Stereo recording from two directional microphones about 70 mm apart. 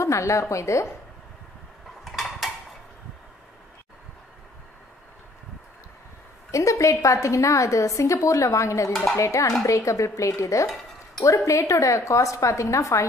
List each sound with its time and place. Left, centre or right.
0.0 s a woman's voice: left
2.0 s mechanisms: centre
6.5 s a woman's voice: left